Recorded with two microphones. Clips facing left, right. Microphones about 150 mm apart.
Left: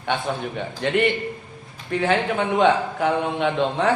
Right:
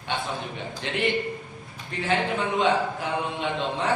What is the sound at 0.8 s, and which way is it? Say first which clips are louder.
A man's voice: left 5 dB; 60° left (ahead or behind).